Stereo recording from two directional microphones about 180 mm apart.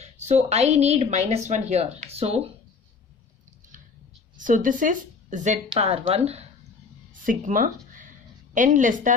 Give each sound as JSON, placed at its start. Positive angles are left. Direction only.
{"t": 0.0, "sound": "speech", "side_deg": -40}
{"t": 4.4, "sound": "a woman's voice", "side_deg": -45}
{"t": 7.2, "sound": "a woman's voice", "side_deg": -50}